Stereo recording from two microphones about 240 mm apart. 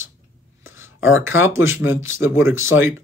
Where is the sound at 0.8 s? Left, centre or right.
Left.